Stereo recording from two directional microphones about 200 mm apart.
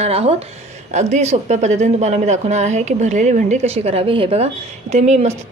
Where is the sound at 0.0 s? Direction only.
30° right (ahead or behind).